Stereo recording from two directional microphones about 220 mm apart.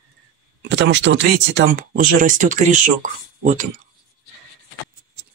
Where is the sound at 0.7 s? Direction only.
55° right (ahead or behind); by 3.7 s 35° right (ahead or behind).